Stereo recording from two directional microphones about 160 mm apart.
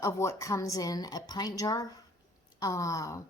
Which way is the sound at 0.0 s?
20° left (ahead or behind).